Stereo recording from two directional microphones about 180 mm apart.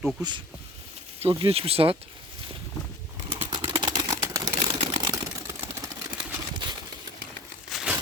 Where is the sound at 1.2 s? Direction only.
30° right (ahead or behind).